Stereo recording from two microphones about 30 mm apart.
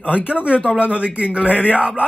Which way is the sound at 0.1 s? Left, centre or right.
Right.